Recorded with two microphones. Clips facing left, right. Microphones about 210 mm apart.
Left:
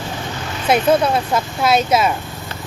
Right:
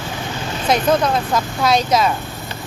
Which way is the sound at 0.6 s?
10° left (ahead or behind).